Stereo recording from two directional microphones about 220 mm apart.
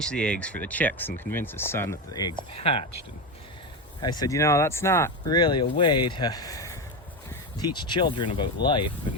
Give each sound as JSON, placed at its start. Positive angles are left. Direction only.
{"t": 0.0, "sound": "speech", "side_deg": 5}
{"t": 4.0, "sound": "speech", "side_deg": 20}